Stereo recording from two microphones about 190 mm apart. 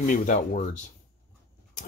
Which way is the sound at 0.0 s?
45° left (ahead or behind).